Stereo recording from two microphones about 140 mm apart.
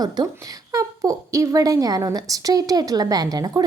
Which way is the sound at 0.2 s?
30° right (ahead or behind).